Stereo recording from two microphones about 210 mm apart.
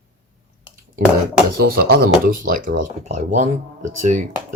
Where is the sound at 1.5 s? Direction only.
45° right (ahead or behind).